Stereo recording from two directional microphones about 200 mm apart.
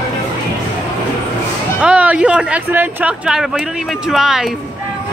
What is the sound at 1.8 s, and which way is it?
Speech, 5° right (ahead or behind).